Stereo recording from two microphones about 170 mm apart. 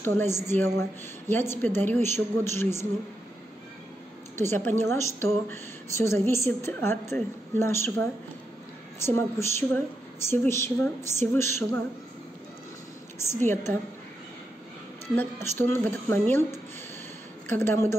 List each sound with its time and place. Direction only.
0.0 s a woman's voice: 15° left (ahead or behind)
4.4 s a woman's voice: 15° left (ahead or behind)
9.0 s a woman's voice: 15° left (ahead or behind)
13.2 s a woman's voice: 15° left (ahead or behind)
15.1 s a woman's voice: 15° left (ahead or behind)
17.5 s a woman's voice: 15° left (ahead or behind)